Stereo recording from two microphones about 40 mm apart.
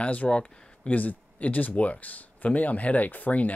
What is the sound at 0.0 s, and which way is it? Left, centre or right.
Speech, left.